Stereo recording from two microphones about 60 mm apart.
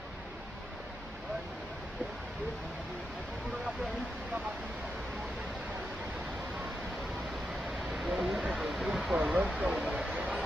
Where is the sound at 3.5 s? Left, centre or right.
Centre.